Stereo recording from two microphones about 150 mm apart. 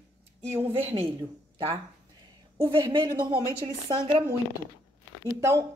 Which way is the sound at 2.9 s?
30° right (ahead or behind).